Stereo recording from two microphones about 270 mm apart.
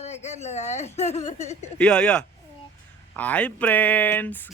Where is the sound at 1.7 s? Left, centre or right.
Centre.